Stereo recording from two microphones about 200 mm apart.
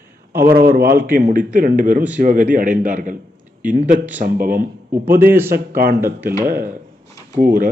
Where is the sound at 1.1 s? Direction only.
45° right (ahead or behind).